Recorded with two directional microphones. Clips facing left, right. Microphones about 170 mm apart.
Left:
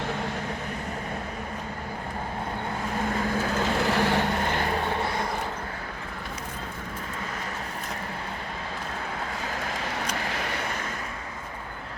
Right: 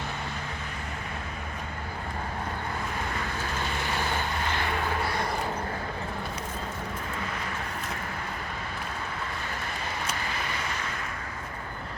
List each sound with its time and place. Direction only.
3.8 s vehicle: 75° left (ahead or behind)
4.4 s vehicle: 40° left (ahead or behind)
10.2 s vehicle: 75° left (ahead or behind)